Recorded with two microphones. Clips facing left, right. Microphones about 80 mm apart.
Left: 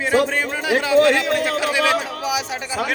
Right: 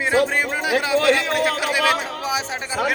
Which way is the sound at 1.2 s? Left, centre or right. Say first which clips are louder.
Left 1 dB; right.